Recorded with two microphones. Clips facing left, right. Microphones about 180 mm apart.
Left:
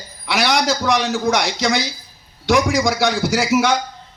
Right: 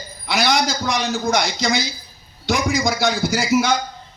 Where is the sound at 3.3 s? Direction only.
75° left (ahead or behind).